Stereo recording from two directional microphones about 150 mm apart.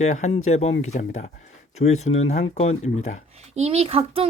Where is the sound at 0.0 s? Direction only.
50° left (ahead or behind).